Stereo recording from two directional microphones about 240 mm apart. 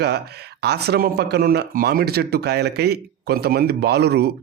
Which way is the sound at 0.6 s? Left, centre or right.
Right.